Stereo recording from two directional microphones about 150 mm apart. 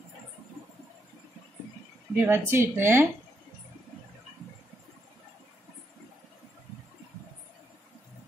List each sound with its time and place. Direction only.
2.1 s a woman's voice: 15° right (ahead or behind)